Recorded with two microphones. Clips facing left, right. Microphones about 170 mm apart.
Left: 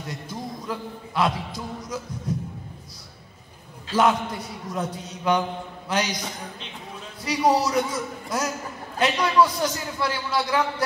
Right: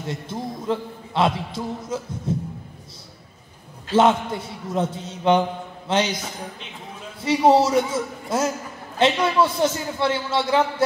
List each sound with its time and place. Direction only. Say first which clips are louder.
0.0 s a man's voice: right 4 dB; 25° right (ahead or behind)
3.9 s a man's voice: right 4 dB; 25° right (ahead or behind)
7.2 s a man's voice: right 5 dB; 25° right (ahead or behind)